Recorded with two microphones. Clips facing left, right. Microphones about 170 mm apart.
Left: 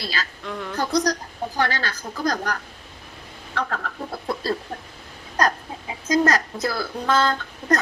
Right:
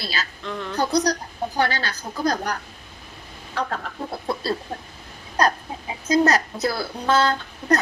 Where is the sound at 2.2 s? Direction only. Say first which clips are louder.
Right 1 dB; 20° right (ahead or behind).